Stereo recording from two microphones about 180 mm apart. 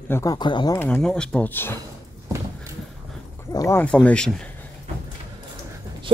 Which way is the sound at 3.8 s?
5° left (ahead or behind).